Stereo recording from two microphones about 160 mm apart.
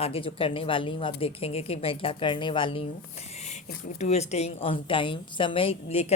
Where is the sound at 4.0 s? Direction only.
45° left (ahead or behind).